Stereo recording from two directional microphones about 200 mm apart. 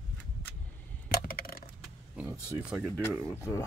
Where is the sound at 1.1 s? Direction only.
45° left (ahead or behind).